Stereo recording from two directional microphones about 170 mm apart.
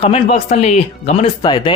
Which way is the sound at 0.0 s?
35° left (ahead or behind).